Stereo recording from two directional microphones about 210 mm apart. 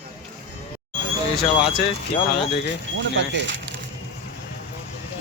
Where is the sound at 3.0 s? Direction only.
60° right (ahead or behind).